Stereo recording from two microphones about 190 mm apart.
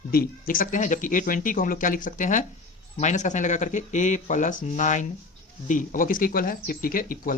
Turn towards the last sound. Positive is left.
turn(degrees=45)  # may be behind; listen again after turning